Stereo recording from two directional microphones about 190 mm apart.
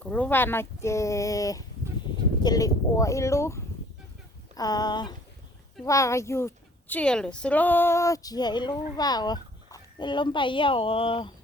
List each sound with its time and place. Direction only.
0.0 s a woman's voice: 5° left (ahead or behind); by 11.3 s 30° left (ahead or behind)